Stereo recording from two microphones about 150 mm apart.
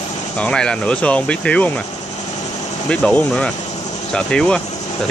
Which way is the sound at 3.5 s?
45° left (ahead or behind).